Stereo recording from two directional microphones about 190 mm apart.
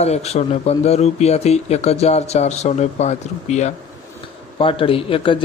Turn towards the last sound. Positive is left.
turn(degrees=30)  # may be behind; listen again after turning